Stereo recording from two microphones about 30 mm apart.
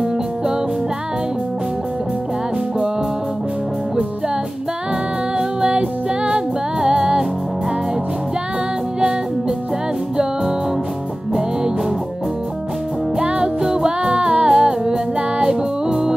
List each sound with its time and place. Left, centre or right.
5.6 s music: right
13.2 s music: right
14.5 s music: right